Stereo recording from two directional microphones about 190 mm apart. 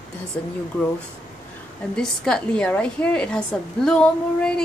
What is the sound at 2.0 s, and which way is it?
A woman's voice, 5° left (ahead or behind).